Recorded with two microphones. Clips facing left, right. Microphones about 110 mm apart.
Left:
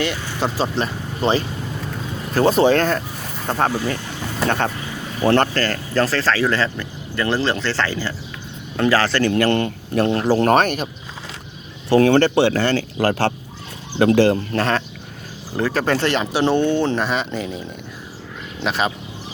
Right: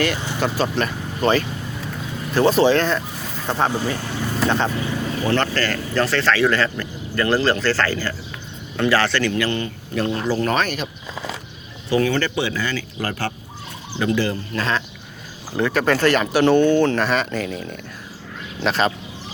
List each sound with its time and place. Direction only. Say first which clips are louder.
0.3 s speech: left 1 dB; 30° left (ahead or behind)
2.3 s speech: left 1 dB; 40° left (ahead or behind)
6.5 s speech: even; 20° left (ahead or behind)
8.8 s speech: left 2 dB; 35° left (ahead or behind)
11.9 s speech: left 6 dB; 65° left (ahead or behind); by 13.3 s 80° left
14.0 s speech: left 7 dB; 65° left (ahead or behind)
15.5 s speech: right 1 dB; 35° left (ahead or behind); by 18.9 s 10° left (ahead or behind)